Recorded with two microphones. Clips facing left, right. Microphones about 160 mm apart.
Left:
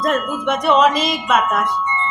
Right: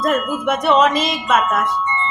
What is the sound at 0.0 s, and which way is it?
Speech, 5° right (ahead or behind).